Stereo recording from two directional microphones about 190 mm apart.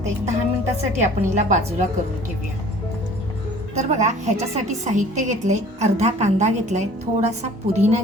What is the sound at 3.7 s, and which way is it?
A woman's voice, 40° right (ahead or behind).